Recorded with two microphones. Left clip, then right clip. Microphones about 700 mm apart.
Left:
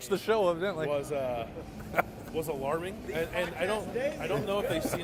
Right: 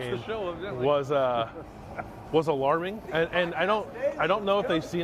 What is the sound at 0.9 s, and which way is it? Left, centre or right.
Speech, right.